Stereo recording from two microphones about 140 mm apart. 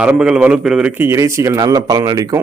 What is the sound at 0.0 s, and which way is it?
A man's voice, 5° right (ahead or behind).